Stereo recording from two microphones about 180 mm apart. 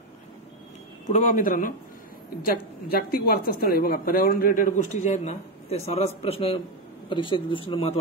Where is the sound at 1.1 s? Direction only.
45° left (ahead or behind).